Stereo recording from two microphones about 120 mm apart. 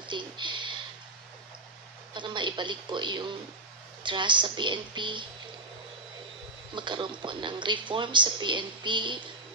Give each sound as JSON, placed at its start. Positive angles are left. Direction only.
{"t": 0.1, "sound": "a sound", "side_deg": -40}
{"t": 2.1, "sound": "speech", "side_deg": -40}
{"t": 6.7, "sound": "speech", "side_deg": -40}